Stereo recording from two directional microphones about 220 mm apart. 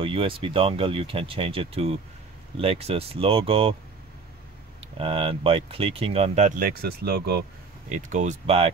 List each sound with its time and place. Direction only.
0.0 s speech: 25° right (ahead or behind)
4.9 s speech: 25° right (ahead or behind); by 7.4 s 45° right (ahead or behind)
7.9 s speech: 30° right (ahead or behind)